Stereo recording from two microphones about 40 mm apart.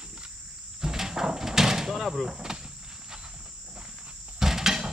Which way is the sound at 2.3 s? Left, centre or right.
Centre.